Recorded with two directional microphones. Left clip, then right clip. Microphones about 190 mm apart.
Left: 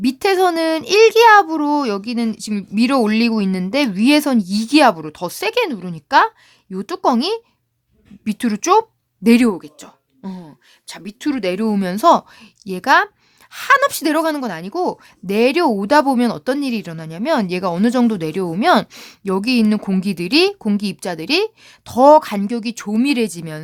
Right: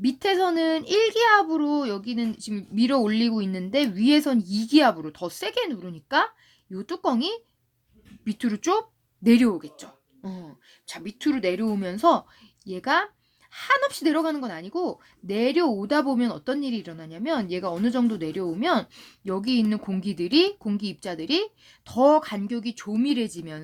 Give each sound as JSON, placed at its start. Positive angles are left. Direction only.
{"t": 0.0, "sound": "speech", "side_deg": 35}